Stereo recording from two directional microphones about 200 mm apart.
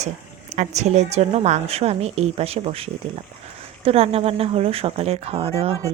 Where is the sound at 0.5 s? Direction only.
35° right (ahead or behind).